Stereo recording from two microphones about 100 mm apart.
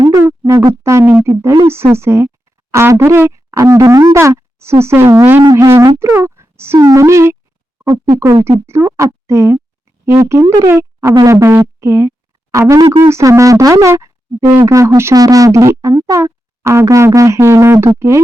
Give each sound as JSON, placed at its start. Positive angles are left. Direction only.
{"t": 0.2, "sound": "speech", "side_deg": -30}
{"t": 6.1, "sound": "a sound", "side_deg": -25}
{"t": 6.7, "sound": "speech", "side_deg": -35}
{"t": 10.4, "sound": "speech", "side_deg": -40}
{"t": 10.7, "sound": "speech", "side_deg": -25}